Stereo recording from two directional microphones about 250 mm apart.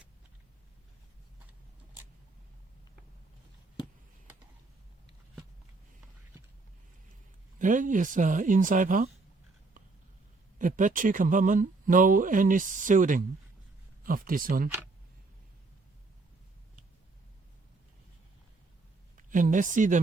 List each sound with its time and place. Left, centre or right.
7.6 s speech: right
10.6 s speech: right
19.1 s speech: right